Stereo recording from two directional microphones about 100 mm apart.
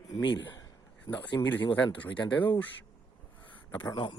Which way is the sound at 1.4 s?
20° left (ahead or behind).